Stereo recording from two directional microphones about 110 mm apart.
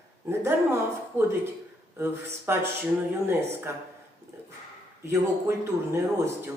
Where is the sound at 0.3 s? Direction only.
25° right (ahead or behind).